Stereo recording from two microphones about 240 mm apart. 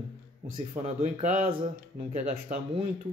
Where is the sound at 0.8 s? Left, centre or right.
Right.